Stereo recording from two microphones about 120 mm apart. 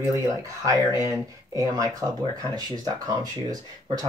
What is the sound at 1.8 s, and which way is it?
Speech, 30° right (ahead or behind).